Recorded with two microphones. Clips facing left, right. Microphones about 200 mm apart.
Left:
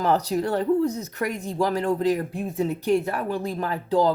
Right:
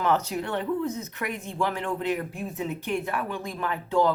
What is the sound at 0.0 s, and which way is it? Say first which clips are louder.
Speech: left 3 dB; 35° left (ahead or behind).